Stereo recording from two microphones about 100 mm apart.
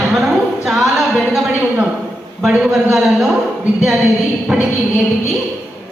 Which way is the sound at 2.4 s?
5° right (ahead or behind).